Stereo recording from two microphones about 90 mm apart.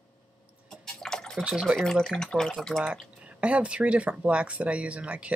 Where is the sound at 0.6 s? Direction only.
5° left (ahead or behind).